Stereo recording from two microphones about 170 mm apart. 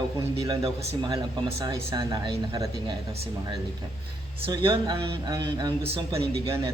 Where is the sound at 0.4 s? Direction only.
20° right (ahead or behind).